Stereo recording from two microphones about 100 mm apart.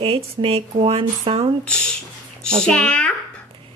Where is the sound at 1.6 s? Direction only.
10° left (ahead or behind).